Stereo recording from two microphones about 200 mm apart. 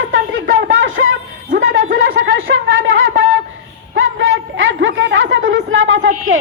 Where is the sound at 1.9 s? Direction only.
70° right (ahead or behind).